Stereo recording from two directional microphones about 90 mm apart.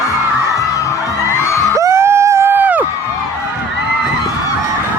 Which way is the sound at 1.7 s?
35° right (ahead or behind).